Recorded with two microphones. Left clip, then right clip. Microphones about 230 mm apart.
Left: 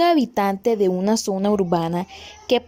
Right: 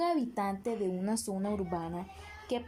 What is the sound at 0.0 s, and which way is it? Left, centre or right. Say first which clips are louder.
A child's voice: left 14 dB; left.